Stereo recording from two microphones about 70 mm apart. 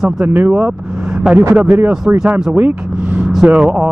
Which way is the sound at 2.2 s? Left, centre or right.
Centre.